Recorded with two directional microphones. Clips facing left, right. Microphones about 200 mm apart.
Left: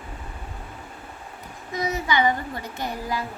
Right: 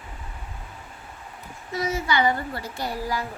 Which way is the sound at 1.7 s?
15° left (ahead or behind).